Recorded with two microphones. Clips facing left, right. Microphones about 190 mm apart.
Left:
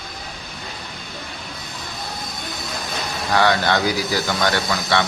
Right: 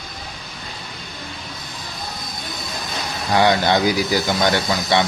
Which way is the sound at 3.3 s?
15° right (ahead or behind).